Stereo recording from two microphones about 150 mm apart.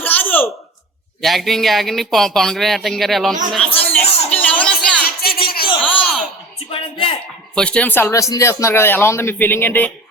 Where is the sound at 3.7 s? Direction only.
10° left (ahead or behind).